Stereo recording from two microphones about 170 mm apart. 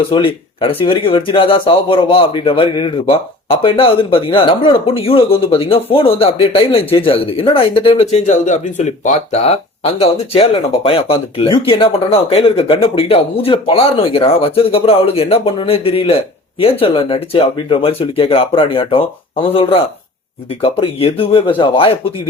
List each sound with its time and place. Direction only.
0.1 s speech: 30° left (ahead or behind)